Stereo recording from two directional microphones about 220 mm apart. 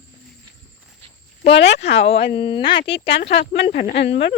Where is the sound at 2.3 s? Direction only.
20° left (ahead or behind).